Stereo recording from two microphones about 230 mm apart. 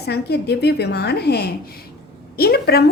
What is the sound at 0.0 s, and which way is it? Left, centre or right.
A woman's voice, left.